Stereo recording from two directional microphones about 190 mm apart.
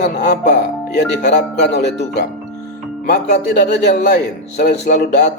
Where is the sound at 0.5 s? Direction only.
65° left (ahead or behind).